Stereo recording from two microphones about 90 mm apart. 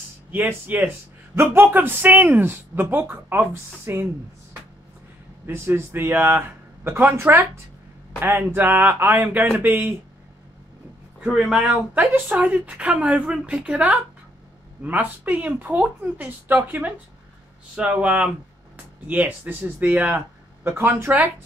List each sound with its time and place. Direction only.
0.3 s speech: 20° right (ahead or behind)
5.5 s speech: 25° right (ahead or behind)
11.1 s a woman's voice: 5° right (ahead or behind)
12.0 s a woman's voice: 20° right (ahead or behind)